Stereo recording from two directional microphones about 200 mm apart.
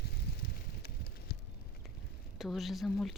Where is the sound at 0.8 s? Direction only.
50° left (ahead or behind).